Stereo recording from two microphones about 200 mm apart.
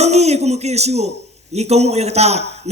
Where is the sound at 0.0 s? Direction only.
35° right (ahead or behind).